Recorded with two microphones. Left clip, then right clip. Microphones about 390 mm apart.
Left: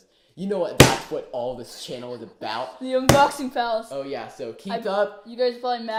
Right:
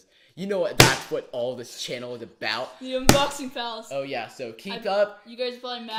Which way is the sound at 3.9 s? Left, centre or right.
Right.